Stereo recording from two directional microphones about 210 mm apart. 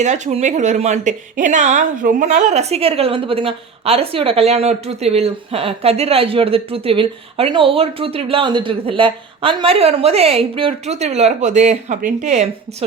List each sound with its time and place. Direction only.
0.0 s a woman's voice: 30° right (ahead or behind)